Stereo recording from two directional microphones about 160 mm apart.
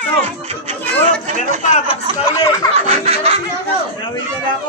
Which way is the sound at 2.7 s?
40° right (ahead or behind).